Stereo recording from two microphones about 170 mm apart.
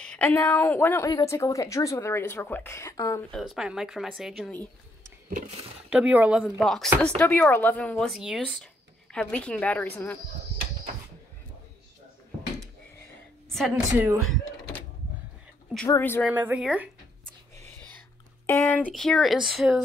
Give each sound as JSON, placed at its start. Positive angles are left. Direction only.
{"t": 0.0, "sound": "a woman's voice", "side_deg": 5}
{"t": 3.3, "sound": "speech", "side_deg": 0}
{"t": 5.9, "sound": "speech", "side_deg": -5}
{"t": 6.6, "sound": "a woman's voice", "side_deg": 5}
{"t": 13.5, "sound": "a woman's voice", "side_deg": 0}
{"t": 16.0, "sound": "a woman's voice", "side_deg": 10}
{"t": 16.3, "sound": "speech", "side_deg": -10}
{"t": 18.6, "sound": "a woman's voice", "side_deg": 10}